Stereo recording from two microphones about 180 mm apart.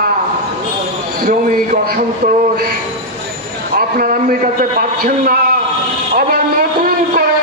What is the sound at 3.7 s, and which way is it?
A man's voice, 50° right (ahead or behind).